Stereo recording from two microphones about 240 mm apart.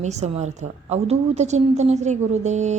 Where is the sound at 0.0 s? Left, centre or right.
Right.